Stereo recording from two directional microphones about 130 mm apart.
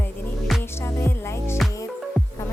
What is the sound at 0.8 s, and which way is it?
Music, 20° left (ahead or behind).